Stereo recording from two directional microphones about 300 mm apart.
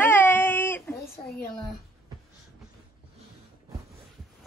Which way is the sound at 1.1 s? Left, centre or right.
Left.